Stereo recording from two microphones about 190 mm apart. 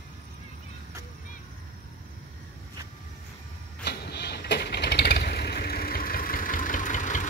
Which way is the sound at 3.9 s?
60° left (ahead or behind).